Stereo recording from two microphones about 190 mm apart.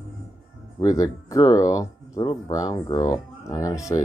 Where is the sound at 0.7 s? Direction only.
15° left (ahead or behind).